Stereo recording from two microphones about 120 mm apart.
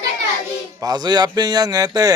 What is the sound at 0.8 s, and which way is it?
Speech, 35° right (ahead or behind).